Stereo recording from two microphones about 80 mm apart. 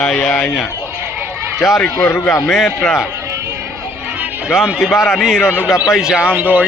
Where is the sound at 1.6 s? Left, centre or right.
Left.